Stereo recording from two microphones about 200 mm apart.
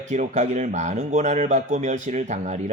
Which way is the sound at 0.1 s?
35° right (ahead or behind).